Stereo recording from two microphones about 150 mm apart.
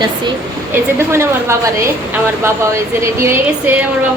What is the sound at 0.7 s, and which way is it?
Speech, 15° right (ahead or behind).